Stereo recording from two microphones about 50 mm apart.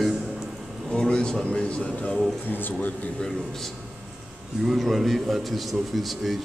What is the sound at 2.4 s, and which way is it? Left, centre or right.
Speech, left.